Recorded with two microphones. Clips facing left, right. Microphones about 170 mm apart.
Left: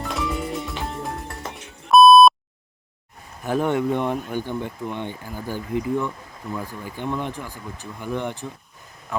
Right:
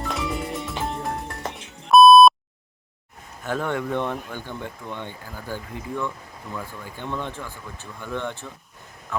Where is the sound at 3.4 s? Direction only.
15° left (ahead or behind).